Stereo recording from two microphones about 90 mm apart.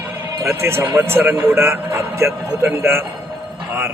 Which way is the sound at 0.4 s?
30° right (ahead or behind).